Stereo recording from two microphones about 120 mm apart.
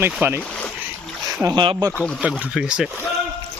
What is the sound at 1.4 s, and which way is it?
Speech, 40° right (ahead or behind).